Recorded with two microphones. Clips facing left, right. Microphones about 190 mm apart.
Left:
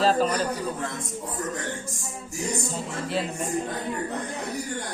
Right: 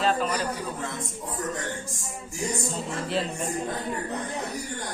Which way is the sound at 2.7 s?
Centre (ahead or behind).